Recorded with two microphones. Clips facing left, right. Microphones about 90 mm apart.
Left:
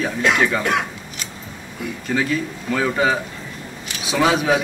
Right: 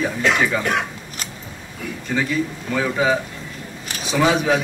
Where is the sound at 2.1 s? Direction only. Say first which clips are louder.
Even; centre (ahead or behind).